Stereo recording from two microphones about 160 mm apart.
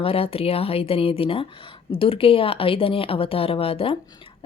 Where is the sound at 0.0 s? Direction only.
35° left (ahead or behind).